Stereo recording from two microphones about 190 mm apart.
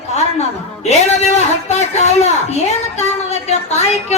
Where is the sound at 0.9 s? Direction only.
35° left (ahead or behind).